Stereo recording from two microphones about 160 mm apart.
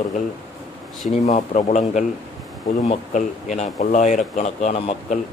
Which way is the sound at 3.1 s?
50° left (ahead or behind).